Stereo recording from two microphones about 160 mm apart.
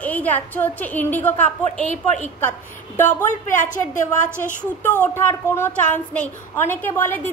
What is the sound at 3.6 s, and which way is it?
Speech, 55° left (ahead or behind).